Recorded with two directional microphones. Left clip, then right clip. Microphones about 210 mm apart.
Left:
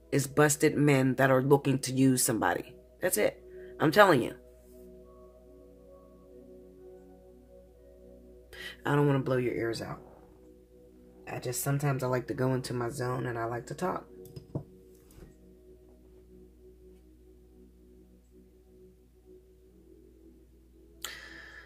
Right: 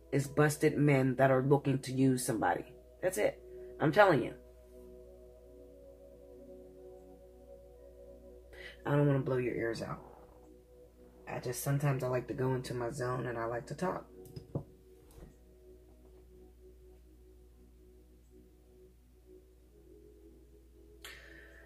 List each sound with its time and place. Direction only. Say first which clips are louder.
0.1 s speech: left 5 dB; 40° left (ahead or behind)
8.5 s speech: left 5 dB; 45° left (ahead or behind)
11.9 s speech: left 3 dB; 50° left (ahead or behind)
21.0 s music: left 8 dB; 50° left (ahead or behind)